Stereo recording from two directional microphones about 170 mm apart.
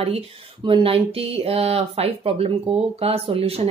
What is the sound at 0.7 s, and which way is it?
Speech, 35° right (ahead or behind).